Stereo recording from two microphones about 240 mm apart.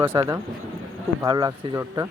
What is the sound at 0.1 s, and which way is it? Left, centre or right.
Speech, centre.